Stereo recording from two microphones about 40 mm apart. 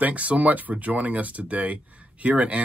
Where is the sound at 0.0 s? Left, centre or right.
Right.